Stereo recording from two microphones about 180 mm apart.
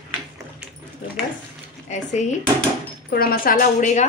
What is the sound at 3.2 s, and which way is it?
Speech, 55° left (ahead or behind).